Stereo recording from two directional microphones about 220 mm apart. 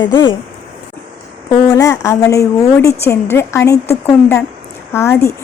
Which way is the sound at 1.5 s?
15° left (ahead or behind).